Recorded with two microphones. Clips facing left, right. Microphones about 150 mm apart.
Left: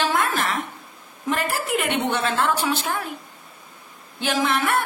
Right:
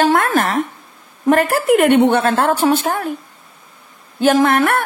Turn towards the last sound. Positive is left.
turn(degrees=-55)  # may be behind; listen again after turning